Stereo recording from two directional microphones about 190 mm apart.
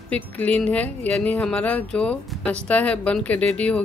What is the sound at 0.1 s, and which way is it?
Speech, 5° left (ahead or behind).